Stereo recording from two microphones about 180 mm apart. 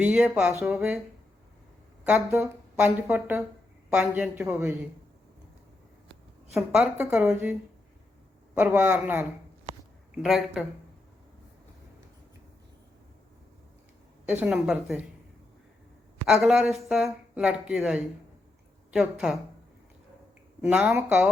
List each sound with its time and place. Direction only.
0.0 s speech: 5° right (ahead or behind)
2.0 s speech: 10° right (ahead or behind)
6.5 s speech: centre (ahead or behind)
8.5 s speech: 5° right (ahead or behind)
10.2 s speech: centre (ahead or behind)
14.3 s speech: 5° right (ahead or behind)
16.2 s speech: centre (ahead or behind)
20.6 s speech: 5° right (ahead or behind)